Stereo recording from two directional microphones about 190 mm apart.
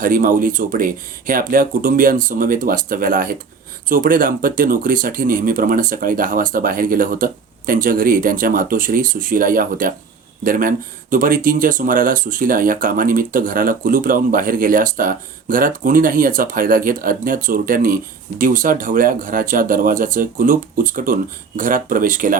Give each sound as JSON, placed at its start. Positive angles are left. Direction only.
{"t": 0.0, "sound": "speech", "side_deg": -45}